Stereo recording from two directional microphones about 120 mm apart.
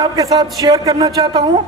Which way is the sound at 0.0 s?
35° right (ahead or behind).